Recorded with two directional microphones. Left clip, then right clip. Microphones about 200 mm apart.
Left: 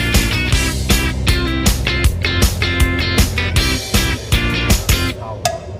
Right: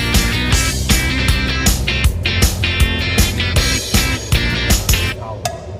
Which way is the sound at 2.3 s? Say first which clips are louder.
Even; centre (ahead or behind).